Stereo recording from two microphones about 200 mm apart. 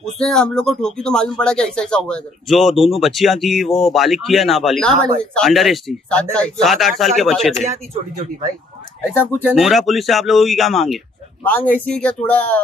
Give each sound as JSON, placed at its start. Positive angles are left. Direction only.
{"t": 0.2, "sound": "speech", "side_deg": 5}
{"t": 7.6, "sound": "speech", "side_deg": -35}
{"t": 9.1, "sound": "speech", "side_deg": 10}
{"t": 9.5, "sound": "speech", "side_deg": 0}